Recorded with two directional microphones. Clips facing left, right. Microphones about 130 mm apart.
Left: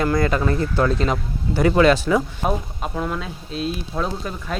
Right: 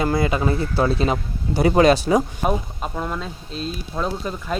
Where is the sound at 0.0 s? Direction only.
20° right (ahead or behind).